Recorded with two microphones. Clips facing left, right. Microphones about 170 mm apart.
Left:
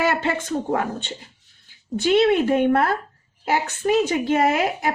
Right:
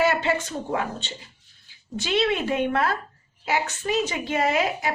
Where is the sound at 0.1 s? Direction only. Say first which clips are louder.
Left 2 dB; 50° left (ahead or behind).